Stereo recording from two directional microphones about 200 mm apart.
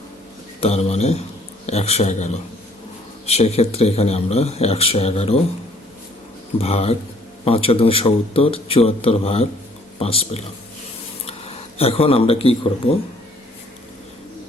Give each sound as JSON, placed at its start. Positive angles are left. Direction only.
{"t": 0.6, "sound": "speech", "side_deg": 30}
{"t": 6.6, "sound": "a man's voice", "side_deg": 30}